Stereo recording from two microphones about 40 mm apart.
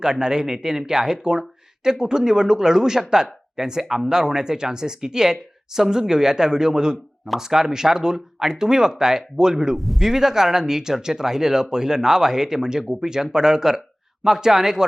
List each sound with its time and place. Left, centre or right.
0.0 s speech: centre
9.7 s speech: centre
10.0 s speech: centre